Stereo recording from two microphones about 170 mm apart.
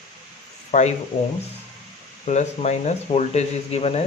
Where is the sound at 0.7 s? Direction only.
40° left (ahead or behind).